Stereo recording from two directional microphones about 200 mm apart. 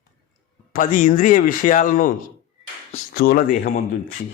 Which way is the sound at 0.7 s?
40° left (ahead or behind).